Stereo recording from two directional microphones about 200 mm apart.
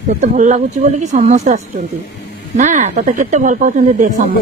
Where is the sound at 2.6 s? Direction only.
35° right (ahead or behind).